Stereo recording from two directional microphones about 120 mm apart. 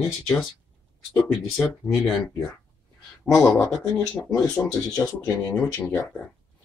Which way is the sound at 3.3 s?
5° left (ahead or behind).